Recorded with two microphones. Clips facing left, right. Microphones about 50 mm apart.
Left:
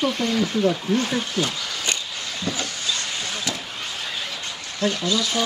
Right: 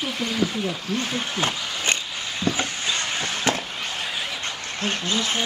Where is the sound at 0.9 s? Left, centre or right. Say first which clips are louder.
Left 5 dB; centre.